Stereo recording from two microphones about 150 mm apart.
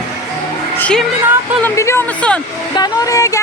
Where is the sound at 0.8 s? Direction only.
5° left (ahead or behind).